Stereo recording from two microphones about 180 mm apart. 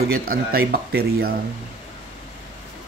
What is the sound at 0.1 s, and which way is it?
Speech, 55° right (ahead or behind).